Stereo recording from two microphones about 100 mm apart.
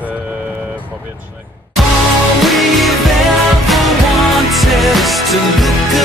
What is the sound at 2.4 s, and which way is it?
Music, centre (ahead or behind).